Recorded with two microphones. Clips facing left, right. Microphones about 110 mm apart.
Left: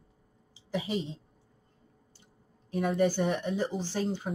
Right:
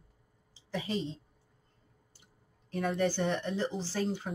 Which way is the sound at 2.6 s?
5° left (ahead or behind).